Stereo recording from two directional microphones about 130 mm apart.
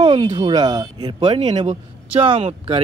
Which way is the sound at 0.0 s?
40° right (ahead or behind).